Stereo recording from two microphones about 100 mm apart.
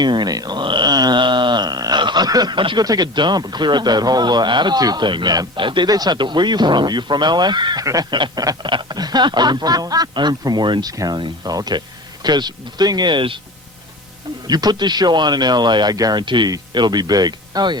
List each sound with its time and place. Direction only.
0.0 s a sound: 45° right (ahead or behind)
2.8 s a man's voice: 40° right (ahead or behind)
14.4 s a man's voice: 40° right (ahead or behind)